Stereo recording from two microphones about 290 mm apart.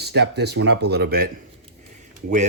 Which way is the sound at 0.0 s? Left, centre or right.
Right.